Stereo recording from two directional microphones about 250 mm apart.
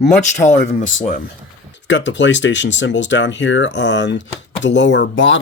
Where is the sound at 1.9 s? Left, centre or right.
Left.